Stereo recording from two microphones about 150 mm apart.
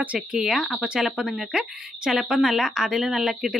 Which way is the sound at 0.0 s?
5° right (ahead or behind).